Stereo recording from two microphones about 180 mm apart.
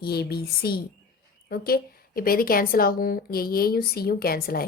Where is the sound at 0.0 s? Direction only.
60° left (ahead or behind).